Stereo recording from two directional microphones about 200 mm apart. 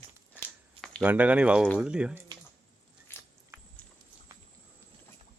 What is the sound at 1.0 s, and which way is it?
Speech, 5° right (ahead or behind).